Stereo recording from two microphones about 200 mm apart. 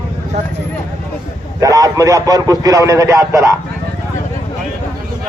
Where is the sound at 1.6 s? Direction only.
15° right (ahead or behind).